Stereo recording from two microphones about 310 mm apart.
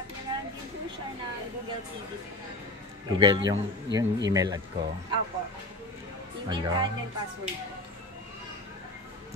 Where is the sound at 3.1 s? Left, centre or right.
Centre.